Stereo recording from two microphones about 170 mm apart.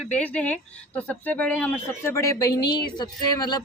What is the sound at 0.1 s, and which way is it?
Speech, 10° left (ahead or behind).